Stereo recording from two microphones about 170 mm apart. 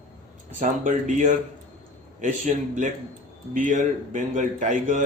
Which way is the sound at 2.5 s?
45° right (ahead or behind).